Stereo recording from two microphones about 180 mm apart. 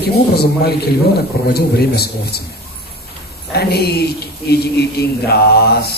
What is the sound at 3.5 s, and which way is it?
A man's voice, 60° left (ahead or behind).